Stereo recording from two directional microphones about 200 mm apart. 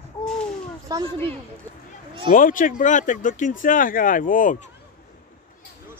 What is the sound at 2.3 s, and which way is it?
Speech, 40° left (ahead or behind).